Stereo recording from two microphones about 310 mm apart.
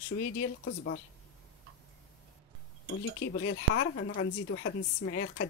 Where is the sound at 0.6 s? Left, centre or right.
Left.